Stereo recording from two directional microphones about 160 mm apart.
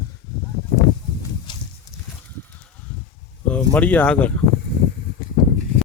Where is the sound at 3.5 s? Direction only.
10° left (ahead or behind).